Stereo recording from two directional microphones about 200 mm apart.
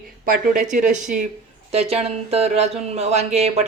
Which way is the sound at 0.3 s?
40° right (ahead or behind).